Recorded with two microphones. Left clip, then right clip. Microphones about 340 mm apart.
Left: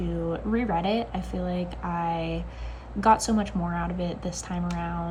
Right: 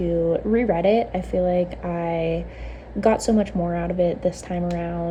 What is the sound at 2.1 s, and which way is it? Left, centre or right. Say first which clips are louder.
A woman's voice: right 7 dB; centre.